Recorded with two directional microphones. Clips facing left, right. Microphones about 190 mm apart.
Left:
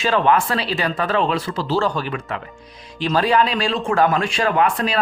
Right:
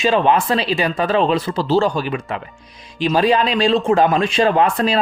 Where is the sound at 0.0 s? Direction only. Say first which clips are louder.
Right 2 dB; 20° right (ahead or behind).